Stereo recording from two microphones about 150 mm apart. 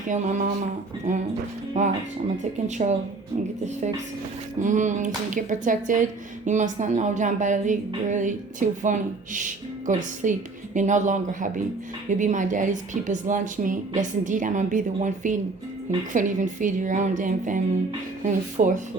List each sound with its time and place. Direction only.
0.1 s speech: 55° right (ahead or behind)
1.7 s speech: 50° right (ahead or behind)